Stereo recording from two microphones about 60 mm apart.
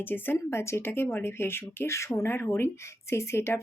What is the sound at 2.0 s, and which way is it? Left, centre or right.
Speech, left.